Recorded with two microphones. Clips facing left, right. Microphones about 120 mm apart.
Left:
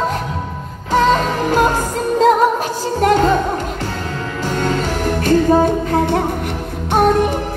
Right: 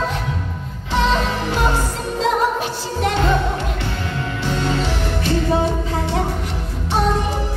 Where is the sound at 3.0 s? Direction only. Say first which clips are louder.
Left 6 dB; 45° left (ahead or behind).